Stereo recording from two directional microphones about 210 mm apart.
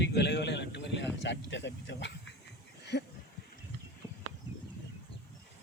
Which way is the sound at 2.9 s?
55° left (ahead or behind).